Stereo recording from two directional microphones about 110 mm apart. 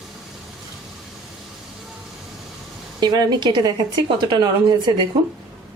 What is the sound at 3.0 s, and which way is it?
A woman's voice, 40° right (ahead or behind).